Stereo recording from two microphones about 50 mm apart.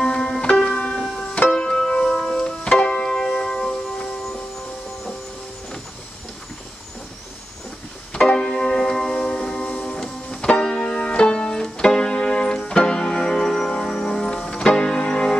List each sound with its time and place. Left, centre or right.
0.0 s music: centre
2.7 s music: left
3.0 s music: centre
8.1 s music: centre
9.4 s music: left